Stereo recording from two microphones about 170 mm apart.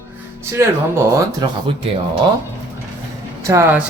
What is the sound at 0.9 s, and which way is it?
Speech, 20° right (ahead or behind).